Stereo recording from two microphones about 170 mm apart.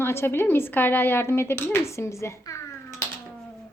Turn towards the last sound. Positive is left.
turn(degrees=15)  # may be behind; listen again after turning